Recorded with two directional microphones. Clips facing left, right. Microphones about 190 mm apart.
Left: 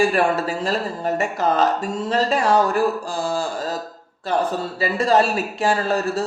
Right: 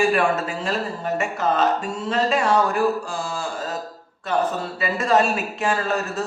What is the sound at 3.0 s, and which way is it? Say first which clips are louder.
Mantra: left 4 dB; 40° left (ahead or behind).